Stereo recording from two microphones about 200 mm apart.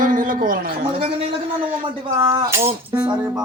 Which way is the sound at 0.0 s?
40° right (ahead or behind).